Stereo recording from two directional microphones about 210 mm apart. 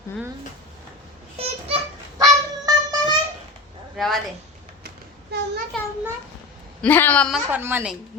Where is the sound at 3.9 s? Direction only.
Centre (ahead or behind).